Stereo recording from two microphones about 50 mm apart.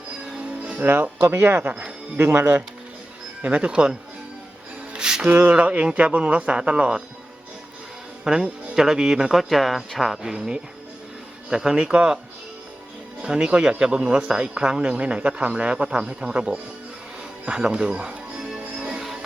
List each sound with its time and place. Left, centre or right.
0.8 s speech: right
3.4 s speech: right
4.9 s music: centre
5.2 s speech: right; by 7.0 s centre
8.2 s speech: centre
10.2 s speech: centre
13.2 s speech: centre
18.9 s music: centre